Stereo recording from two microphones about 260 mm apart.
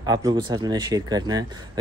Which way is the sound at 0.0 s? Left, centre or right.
Centre.